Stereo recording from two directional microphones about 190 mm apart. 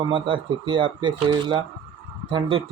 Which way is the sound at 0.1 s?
25° right (ahead or behind).